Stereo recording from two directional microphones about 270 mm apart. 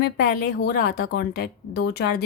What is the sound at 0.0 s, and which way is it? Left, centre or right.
Speech, left.